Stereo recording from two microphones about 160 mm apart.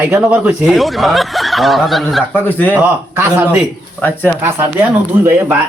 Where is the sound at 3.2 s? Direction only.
15° right (ahead or behind).